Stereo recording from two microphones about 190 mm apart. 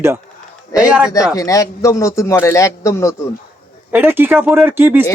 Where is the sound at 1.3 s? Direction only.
15° left (ahead or behind).